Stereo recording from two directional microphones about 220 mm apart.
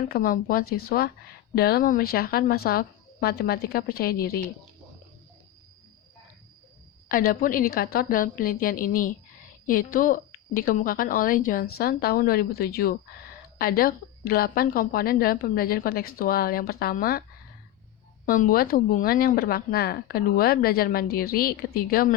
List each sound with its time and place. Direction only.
0.1 s speech: 40° left (ahead or behind)
7.1 s a woman's voice: 40° left (ahead or behind)
18.3 s speech: 40° left (ahead or behind)